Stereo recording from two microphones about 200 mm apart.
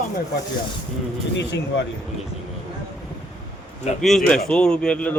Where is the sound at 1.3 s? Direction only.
60° left (ahead or behind).